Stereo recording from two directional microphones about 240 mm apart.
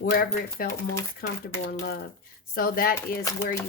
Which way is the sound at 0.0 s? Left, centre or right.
Left.